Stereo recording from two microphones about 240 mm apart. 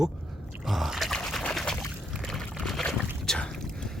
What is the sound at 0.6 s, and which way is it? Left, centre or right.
Pour, centre.